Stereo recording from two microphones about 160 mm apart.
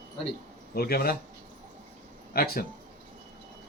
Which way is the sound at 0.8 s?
75° left (ahead or behind).